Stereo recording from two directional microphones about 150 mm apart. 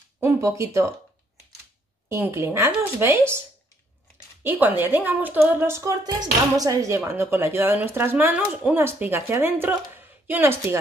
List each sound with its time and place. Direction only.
0.2 s speech: 15° right (ahead or behind)
2.0 s speech: 15° right (ahead or behind)
4.4 s speech: 15° right (ahead or behind)